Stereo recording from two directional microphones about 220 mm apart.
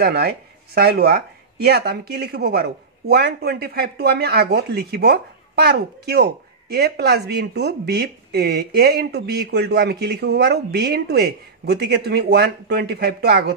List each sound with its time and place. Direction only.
0.0 s speech: 45° right (ahead or behind)